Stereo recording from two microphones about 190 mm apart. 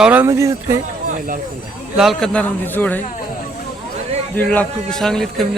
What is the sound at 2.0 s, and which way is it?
A man's voice, centre (ahead or behind).